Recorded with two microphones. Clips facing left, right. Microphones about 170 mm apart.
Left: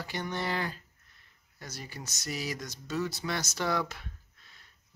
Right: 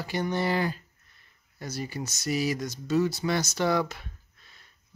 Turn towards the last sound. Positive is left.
turn(degrees=0)  # may be behind; listen again after turning